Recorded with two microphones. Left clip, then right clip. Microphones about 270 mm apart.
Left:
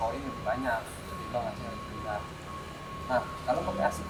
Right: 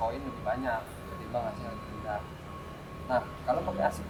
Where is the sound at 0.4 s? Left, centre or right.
Centre.